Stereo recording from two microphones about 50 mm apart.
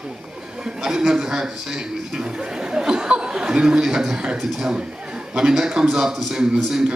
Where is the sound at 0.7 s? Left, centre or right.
Centre.